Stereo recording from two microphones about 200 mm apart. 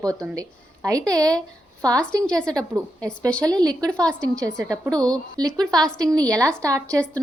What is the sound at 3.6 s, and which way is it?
Speech, 20° right (ahead or behind).